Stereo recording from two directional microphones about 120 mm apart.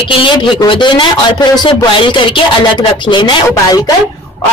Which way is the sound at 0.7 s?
40° left (ahead or behind).